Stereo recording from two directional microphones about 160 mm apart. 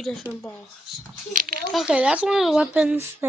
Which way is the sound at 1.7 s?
5° right (ahead or behind).